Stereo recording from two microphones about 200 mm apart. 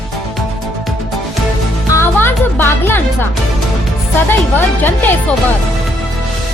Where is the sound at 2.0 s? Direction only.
10° left (ahead or behind).